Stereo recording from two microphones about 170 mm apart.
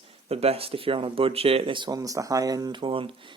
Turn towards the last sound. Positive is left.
turn(degrees=-30)  # may be behind; listen again after turning